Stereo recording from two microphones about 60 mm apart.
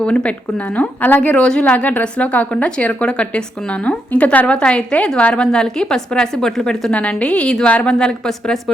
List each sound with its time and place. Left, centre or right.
0.0 s a woman's voice: centre
6.9 s a woman's voice: centre